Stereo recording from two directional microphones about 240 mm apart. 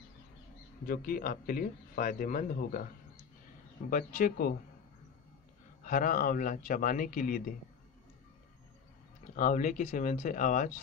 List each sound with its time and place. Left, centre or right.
0.8 s speech: left
3.9 s speech: left
5.9 s speech: left
9.3 s speech: left